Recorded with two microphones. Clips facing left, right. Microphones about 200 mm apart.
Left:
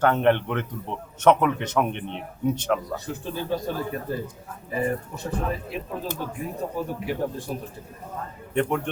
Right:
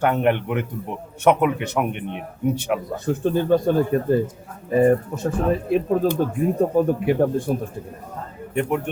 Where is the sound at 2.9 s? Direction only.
50° right (ahead or behind).